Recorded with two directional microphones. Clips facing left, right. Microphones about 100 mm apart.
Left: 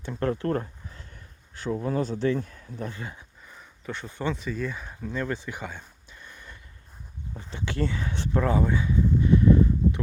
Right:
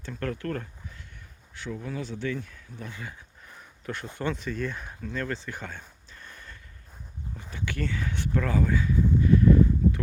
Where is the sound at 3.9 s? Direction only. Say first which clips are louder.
Left 1 dB; centre (ahead or behind).